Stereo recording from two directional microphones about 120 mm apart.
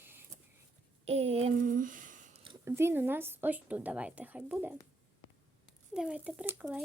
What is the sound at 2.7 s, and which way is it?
Speech, 20° right (ahead or behind).